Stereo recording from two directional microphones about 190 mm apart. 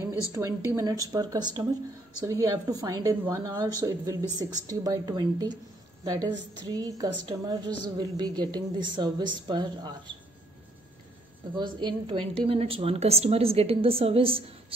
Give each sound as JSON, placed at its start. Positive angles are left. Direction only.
{"t": 0.3, "sound": "a woman's voice", "side_deg": -15}
{"t": 11.5, "sound": "a woman's voice", "side_deg": -25}